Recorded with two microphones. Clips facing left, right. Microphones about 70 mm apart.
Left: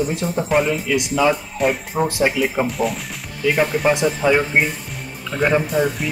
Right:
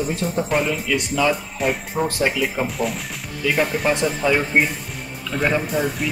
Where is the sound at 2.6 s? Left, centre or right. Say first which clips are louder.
Left 2 dB; centre.